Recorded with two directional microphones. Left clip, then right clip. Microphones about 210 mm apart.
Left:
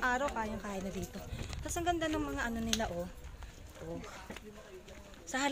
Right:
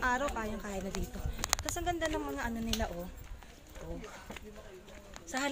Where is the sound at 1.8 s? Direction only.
20° left (ahead or behind).